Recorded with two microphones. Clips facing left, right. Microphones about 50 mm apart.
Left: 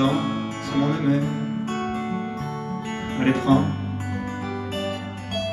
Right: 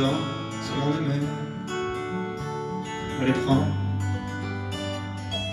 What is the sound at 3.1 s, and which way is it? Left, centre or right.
Speech, left.